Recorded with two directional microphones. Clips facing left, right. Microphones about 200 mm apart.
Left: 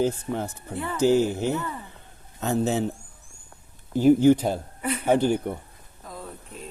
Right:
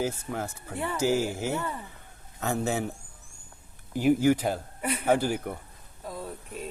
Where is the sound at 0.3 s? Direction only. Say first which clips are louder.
Left 3 dB; 20° left (ahead or behind).